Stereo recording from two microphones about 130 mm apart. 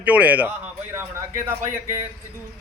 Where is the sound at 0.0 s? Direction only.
10° right (ahead or behind).